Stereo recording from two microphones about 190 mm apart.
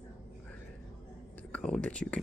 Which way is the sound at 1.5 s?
5° left (ahead or behind).